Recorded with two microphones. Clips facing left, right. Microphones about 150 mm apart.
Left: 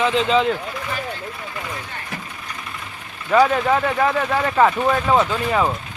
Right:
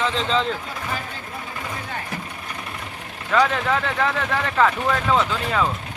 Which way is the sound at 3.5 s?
15° left (ahead or behind).